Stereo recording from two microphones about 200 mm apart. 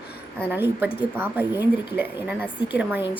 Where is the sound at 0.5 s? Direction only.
10° right (ahead or behind).